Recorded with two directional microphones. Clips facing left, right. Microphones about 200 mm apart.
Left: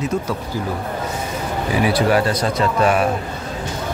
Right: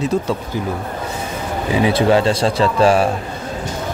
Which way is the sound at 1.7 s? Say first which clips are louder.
Right 3 dB; 25° right (ahead or behind).